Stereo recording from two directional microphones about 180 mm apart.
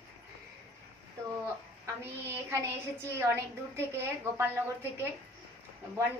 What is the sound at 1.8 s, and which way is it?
Speech, 15° right (ahead or behind).